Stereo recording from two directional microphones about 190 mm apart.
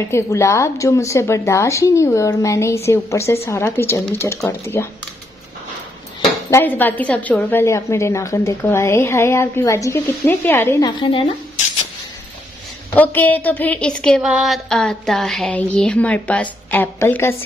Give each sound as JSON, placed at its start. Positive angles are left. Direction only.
{"t": 0.0, "sound": "a woman's voice", "side_deg": 15}
{"t": 6.5, "sound": "a woman's voice", "side_deg": 10}
{"t": 10.9, "sound": "a woman's voice", "side_deg": 25}
{"t": 12.9, "sound": "a sound", "side_deg": 10}
{"t": 16.7, "sound": "a woman's voice", "side_deg": 10}